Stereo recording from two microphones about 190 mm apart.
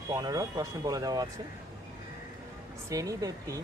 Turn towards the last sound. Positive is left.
turn(degrees=-20)  # may be behind; listen again after turning